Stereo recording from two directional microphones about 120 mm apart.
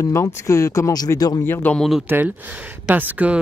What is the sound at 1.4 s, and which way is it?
Speech, 15° left (ahead or behind).